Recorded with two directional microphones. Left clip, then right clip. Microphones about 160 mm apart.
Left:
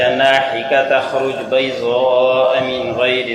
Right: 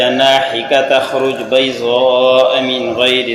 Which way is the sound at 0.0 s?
35° right (ahead or behind).